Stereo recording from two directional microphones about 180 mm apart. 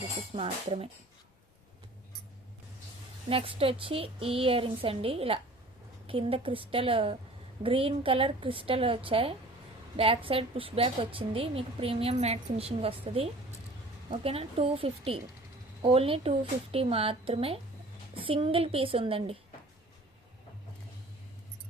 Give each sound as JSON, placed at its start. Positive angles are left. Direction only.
{"t": 0.3, "sound": "a woman's voice", "side_deg": -30}
{"t": 3.2, "sound": "a woman's voice", "side_deg": -30}